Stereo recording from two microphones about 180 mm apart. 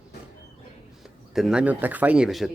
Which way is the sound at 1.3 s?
5° right (ahead or behind).